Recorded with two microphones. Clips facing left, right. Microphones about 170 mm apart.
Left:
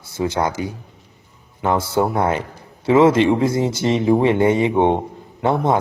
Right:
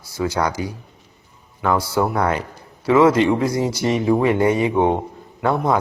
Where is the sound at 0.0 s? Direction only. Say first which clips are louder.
Left 1 dB; 25° left (ahead or behind).